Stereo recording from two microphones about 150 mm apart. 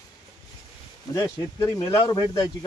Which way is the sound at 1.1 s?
20° left (ahead or behind).